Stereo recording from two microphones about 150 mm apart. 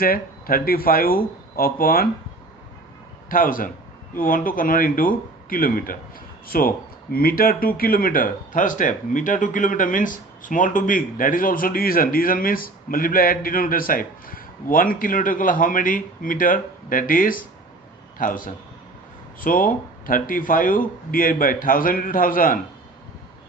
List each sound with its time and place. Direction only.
0.0 s speech: 75° left (ahead or behind)
3.2 s a man's voice: 70° left (ahead or behind)